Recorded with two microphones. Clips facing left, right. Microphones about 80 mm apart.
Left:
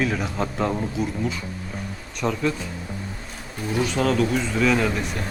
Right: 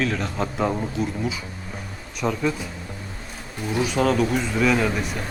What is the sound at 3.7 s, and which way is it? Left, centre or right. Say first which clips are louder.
Speech: right 1 dB; centre.